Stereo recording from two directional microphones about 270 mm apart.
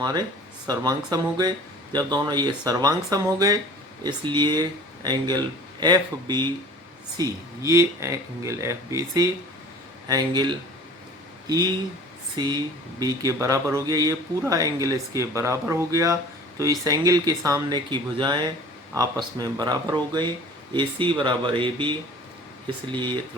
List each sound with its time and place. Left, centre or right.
0.7 s speech: centre